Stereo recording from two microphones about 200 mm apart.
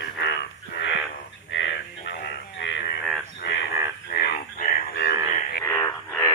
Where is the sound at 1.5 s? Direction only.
65° left (ahead or behind).